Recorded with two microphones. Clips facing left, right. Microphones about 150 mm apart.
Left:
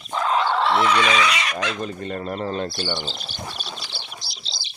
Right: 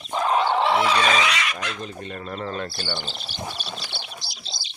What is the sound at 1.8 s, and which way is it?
Speech, 45° left (ahead or behind).